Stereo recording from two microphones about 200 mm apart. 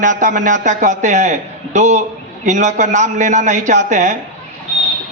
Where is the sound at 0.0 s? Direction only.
40° right (ahead or behind).